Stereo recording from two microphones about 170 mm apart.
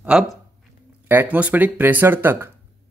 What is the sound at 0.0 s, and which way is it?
A man's voice, 5° right (ahead or behind).